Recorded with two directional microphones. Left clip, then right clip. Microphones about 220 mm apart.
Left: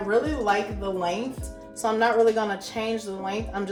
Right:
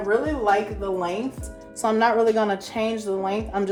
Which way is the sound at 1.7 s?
20° right (ahead or behind).